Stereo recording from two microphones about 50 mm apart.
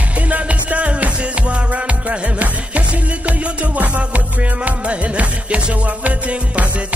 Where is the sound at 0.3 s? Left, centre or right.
Right.